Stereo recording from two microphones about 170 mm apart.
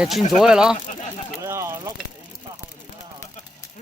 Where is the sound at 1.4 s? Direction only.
15° right (ahead or behind).